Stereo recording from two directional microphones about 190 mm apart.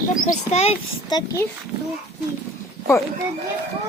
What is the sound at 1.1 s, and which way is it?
Speech, 20° left (ahead or behind).